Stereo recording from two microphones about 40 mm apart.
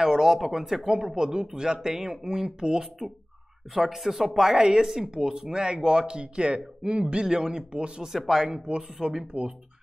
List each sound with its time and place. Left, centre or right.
0.0 s speech: centre
0.8 s speech: centre
3.7 s speech: centre
4.6 s speech: centre
8.0 s speech: centre